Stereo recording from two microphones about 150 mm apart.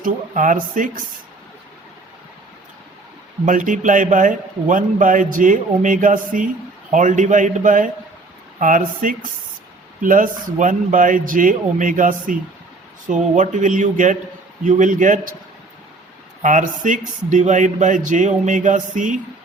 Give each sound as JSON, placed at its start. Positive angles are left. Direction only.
{"t": 0.0, "sound": "a man's voice", "side_deg": -65}
{"t": 3.4, "sound": "a man's voice", "side_deg": -60}
{"t": 16.4, "sound": "a man's voice", "side_deg": -55}